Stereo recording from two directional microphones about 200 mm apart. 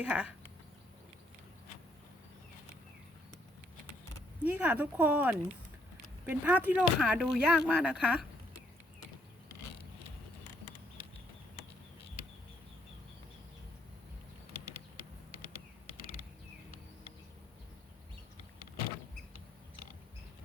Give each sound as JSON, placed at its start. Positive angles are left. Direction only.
{"t": 0.0, "sound": "speech", "side_deg": -5}
{"t": 4.4, "sound": "speech", "side_deg": -10}